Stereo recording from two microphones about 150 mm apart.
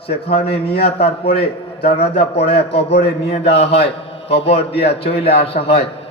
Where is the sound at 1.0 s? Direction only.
40° left (ahead or behind).